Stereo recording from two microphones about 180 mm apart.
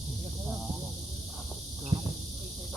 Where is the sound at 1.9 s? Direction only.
40° right (ahead or behind).